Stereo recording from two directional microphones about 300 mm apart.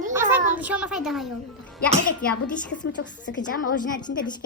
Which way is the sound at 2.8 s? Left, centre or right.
Left.